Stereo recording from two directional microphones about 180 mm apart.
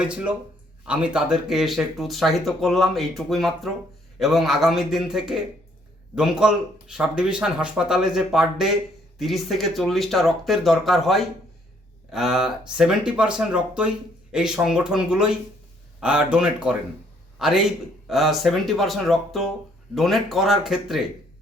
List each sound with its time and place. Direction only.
0.0 s a man's voice: 5° right (ahead or behind)